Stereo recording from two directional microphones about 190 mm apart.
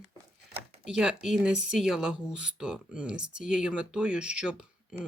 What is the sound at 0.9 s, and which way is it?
Speech, 5° right (ahead or behind).